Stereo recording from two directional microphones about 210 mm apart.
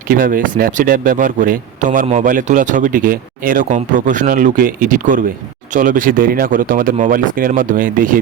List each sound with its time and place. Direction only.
0.1 s speech: 40° right (ahead or behind)